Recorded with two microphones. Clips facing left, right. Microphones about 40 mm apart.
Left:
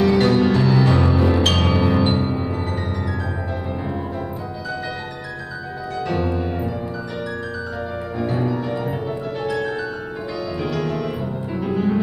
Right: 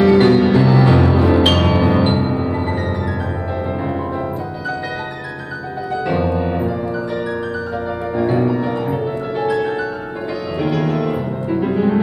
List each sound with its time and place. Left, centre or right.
0.2 s music: centre
6.0 s music: centre
8.2 s music: right